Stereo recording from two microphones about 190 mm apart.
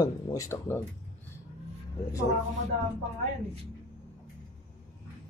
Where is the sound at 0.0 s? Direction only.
20° left (ahead or behind).